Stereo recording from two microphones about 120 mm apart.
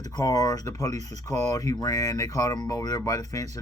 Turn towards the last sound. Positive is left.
turn(degrees=30)  # may be behind; listen again after turning